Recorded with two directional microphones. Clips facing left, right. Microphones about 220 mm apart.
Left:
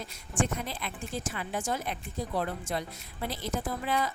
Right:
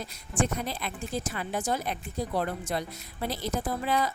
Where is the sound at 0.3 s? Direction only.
40° right (ahead or behind).